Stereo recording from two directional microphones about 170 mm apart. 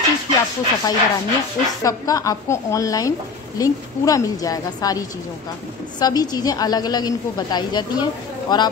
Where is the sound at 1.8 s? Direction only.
20° left (ahead or behind).